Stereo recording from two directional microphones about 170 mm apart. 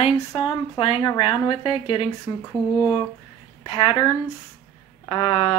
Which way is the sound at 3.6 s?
25° left (ahead or behind).